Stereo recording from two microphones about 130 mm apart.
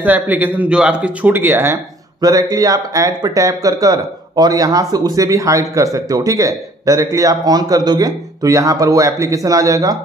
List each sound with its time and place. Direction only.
0.0 s speech: 15° right (ahead or behind)
2.2 s speech: 30° right (ahead or behind)